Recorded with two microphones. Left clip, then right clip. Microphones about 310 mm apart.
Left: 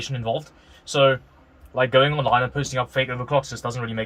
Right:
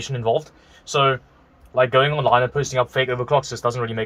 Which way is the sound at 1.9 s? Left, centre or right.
Centre.